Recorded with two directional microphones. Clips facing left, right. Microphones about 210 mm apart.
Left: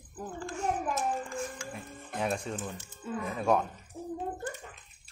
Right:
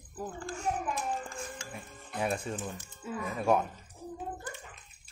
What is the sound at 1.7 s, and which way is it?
Music, centre (ahead or behind).